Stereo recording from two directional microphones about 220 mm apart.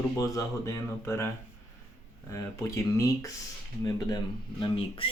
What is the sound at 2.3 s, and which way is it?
Speech, 15° left (ahead or behind).